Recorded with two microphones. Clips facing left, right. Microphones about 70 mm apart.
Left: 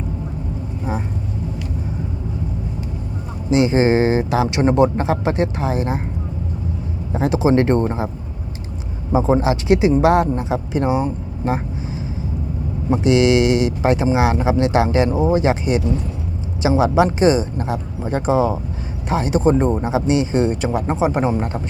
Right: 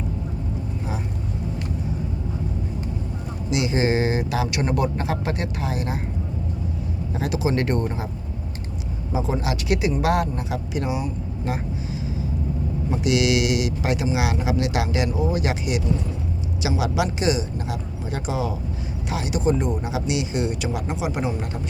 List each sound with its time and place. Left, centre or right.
3.5 s speech: left
7.1 s speech: left
9.1 s a woman's voice: left